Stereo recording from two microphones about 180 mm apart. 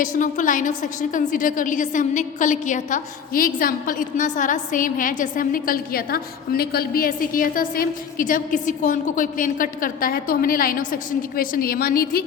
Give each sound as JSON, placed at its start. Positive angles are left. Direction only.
{"t": 0.0, "sound": "a woman's voice", "side_deg": 45}